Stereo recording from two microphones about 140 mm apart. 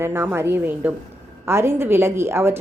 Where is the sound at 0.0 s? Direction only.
15° right (ahead or behind).